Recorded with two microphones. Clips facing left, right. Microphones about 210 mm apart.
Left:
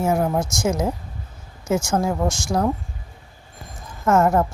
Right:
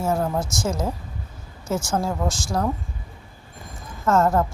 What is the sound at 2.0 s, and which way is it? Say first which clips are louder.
Speech: left 3 dB; 15° left (ahead or behind).